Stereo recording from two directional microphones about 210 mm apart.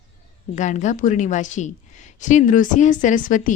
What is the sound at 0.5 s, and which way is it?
A woman's voice, 35° left (ahead or behind).